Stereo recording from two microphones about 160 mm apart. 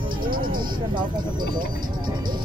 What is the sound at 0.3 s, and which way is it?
Music, 65° right (ahead or behind).